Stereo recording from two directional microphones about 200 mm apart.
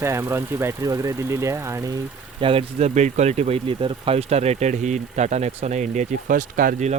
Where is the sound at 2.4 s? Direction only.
30° right (ahead or behind).